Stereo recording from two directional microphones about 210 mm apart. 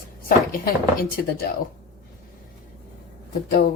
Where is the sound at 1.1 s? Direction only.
50° left (ahead or behind).